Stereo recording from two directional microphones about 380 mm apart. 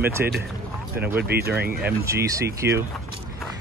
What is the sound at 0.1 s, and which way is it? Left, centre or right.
Speech, centre.